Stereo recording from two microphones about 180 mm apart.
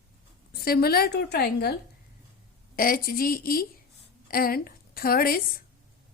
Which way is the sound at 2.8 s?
55° left (ahead or behind).